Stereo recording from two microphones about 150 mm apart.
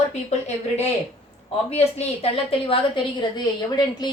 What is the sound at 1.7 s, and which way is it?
A woman's voice, 40° left (ahead or behind).